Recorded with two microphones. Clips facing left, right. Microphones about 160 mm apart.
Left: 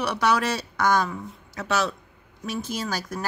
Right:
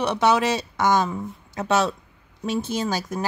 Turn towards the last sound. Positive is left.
turn(degrees=-20)  # may be behind; listen again after turning